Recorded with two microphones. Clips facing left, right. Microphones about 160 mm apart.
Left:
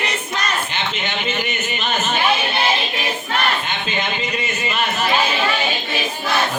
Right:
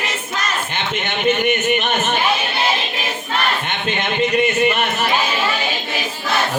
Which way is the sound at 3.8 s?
60° right (ahead or behind).